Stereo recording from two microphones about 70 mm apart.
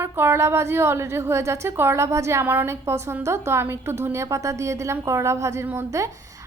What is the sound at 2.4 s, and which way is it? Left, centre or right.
A woman's voice, right.